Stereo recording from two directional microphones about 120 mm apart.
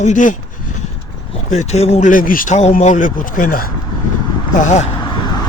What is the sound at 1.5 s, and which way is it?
Speech, 70° left (ahead or behind).